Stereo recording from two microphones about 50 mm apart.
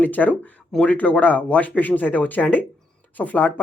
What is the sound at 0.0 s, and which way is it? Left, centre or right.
Speech, left.